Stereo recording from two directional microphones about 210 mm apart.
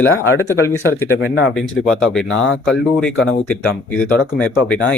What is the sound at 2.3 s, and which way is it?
Speech, 65° left (ahead or behind).